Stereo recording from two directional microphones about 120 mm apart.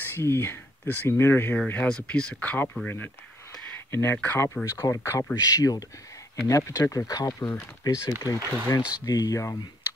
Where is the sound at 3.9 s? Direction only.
20° left (ahead or behind).